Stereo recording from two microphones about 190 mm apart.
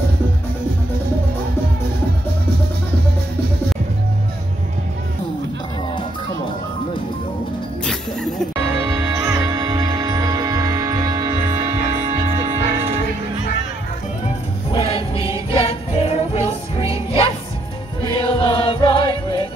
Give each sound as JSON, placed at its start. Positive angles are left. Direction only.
{"t": 7.8, "sound": "music", "side_deg": 5}
{"t": 8.8, "sound": "music", "side_deg": -15}
{"t": 14.7, "sound": "music", "side_deg": 30}
{"t": 18.0, "sound": "music", "side_deg": 25}